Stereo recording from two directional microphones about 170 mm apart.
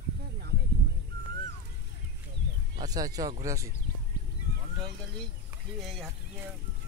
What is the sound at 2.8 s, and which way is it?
Speech, 20° right (ahead or behind).